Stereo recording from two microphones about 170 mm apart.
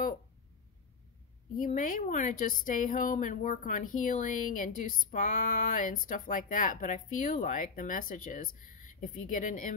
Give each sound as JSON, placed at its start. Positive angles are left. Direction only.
{"t": 1.6, "sound": "a woman's voice", "side_deg": 50}